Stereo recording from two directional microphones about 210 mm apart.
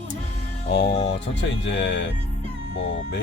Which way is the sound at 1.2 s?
55° left (ahead or behind).